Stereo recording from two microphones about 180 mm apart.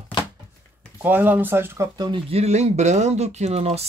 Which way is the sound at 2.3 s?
35° right (ahead or behind).